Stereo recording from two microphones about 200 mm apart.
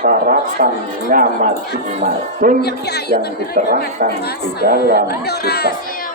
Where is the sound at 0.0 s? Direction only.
45° right (ahead or behind).